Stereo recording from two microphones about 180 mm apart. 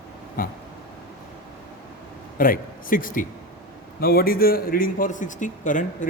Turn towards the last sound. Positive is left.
turn(degrees=45)  # may be behind; listen again after turning